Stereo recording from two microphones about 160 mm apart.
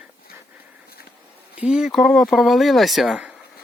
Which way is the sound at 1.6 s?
5° right (ahead or behind).